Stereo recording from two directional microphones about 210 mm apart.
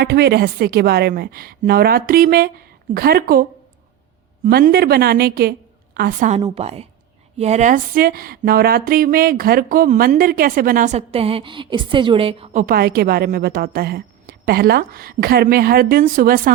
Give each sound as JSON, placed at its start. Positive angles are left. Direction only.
{"t": 0.0, "sound": "a woman's voice", "side_deg": -50}
{"t": 4.4, "sound": "a woman's voice", "side_deg": -45}
{"t": 12.6, "sound": "a woman's voice", "side_deg": -45}